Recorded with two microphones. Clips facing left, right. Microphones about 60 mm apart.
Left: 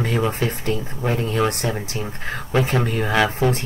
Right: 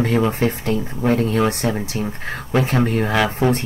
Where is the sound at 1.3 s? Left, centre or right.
Centre.